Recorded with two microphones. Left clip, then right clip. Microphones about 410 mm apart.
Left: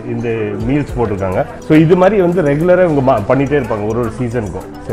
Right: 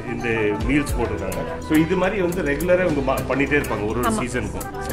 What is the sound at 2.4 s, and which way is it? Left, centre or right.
Speech, left.